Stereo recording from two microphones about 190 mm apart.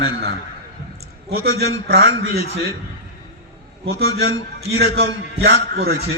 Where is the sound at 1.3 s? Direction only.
55° right (ahead or behind).